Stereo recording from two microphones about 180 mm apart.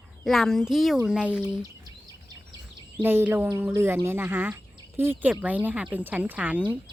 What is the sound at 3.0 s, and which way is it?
Speech, 10° right (ahead or behind).